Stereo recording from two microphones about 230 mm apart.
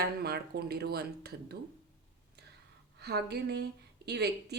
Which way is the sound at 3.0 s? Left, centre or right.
Right.